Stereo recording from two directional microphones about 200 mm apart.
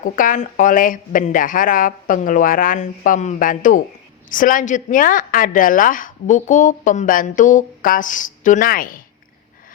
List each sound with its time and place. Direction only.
0.0 s a woman's voice: 40° left (ahead or behind)